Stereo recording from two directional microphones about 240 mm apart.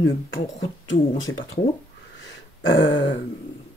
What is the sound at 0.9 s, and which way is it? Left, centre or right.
Speech, left.